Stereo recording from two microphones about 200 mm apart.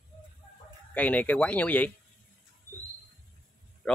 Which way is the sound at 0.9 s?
5° left (ahead or behind).